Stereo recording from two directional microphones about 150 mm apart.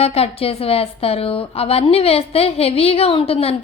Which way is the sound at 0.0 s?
40° left (ahead or behind).